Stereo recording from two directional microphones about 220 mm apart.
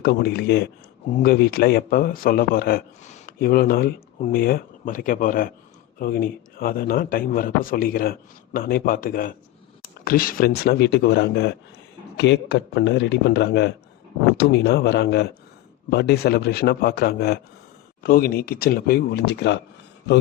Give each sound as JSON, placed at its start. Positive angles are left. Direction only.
{"t": 0.0, "sound": "a man's voice", "side_deg": 45}